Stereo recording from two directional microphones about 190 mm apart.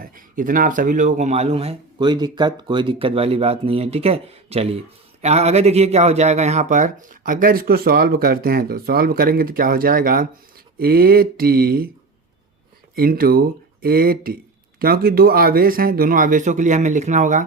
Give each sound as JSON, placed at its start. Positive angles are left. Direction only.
{"t": 0.0, "sound": "speech", "side_deg": -45}
{"t": 13.0, "sound": "speech", "side_deg": -50}